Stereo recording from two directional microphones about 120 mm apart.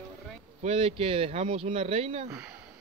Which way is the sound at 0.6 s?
55° right (ahead or behind).